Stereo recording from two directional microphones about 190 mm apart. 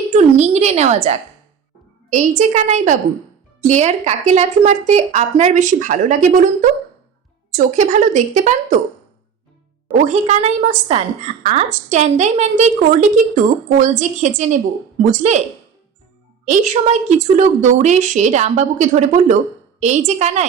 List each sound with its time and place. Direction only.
0.1 s a woman's voice: 35° right (ahead or behind)
10.0 s a woman's voice: 40° right (ahead or behind)
16.5 s a woman's voice: 40° right (ahead or behind)